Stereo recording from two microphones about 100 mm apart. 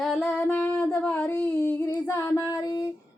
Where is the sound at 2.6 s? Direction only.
40° left (ahead or behind).